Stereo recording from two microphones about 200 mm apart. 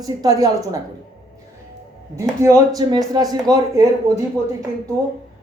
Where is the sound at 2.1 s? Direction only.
15° right (ahead or behind).